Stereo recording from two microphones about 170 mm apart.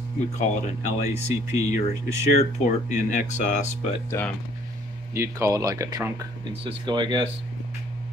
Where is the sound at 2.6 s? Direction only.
45° left (ahead or behind).